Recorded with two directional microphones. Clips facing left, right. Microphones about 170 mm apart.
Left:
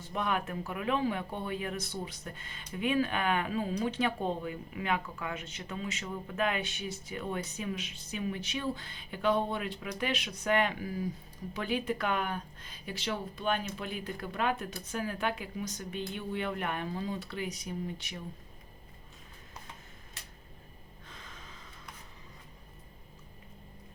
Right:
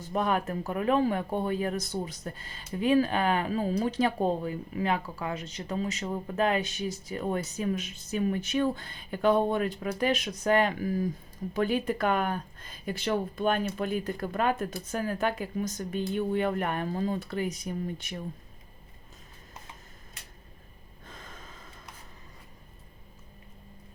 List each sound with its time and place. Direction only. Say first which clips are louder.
0.1 s speech: right 5 dB; 40° right (ahead or behind)
21.1 s gasp: right 4 dB; 45° right (ahead or behind)